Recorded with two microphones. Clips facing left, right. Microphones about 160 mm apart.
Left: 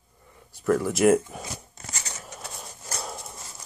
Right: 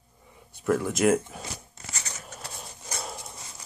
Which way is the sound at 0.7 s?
Centre (ahead or behind).